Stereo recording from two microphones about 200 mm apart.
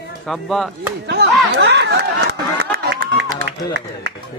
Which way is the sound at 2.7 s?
50° right (ahead or behind).